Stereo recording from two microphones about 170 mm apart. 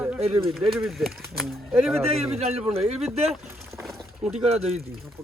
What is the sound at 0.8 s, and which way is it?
Speech, centre (ahead or behind).